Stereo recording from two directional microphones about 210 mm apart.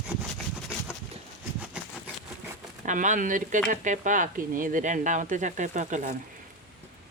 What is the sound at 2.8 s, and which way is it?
Speech, 35° right (ahead or behind).